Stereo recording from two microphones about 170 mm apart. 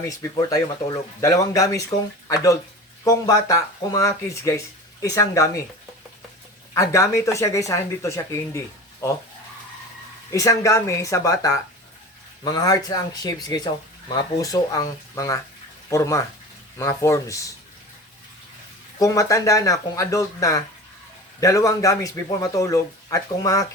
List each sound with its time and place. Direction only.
0.1 s speech: 20° left (ahead or behind)
6.7 s speech: 20° left (ahead or behind)
10.3 s speech: 20° left (ahead or behind)
18.9 s speech: 20° left (ahead or behind)